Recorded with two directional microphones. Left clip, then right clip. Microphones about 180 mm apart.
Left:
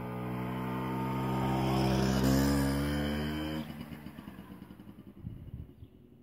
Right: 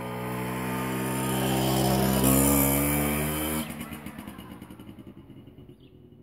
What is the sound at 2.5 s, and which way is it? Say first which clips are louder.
Music: right 7 dB; 5° left (ahead or behind).